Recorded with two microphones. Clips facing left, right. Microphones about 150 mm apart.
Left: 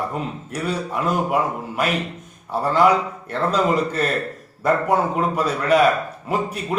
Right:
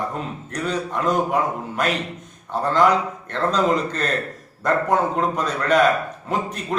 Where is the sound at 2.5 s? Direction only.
10° left (ahead or behind).